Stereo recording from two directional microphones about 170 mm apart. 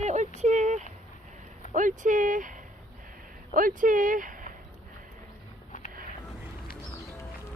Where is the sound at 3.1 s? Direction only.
55° right (ahead or behind).